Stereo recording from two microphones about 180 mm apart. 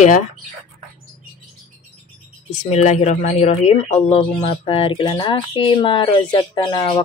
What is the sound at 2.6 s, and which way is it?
Speech, 40° left (ahead or behind).